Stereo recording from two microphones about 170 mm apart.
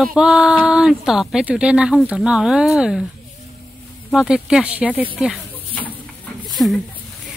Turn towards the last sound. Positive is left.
turn(degrees=0)  # may be behind; listen again after turning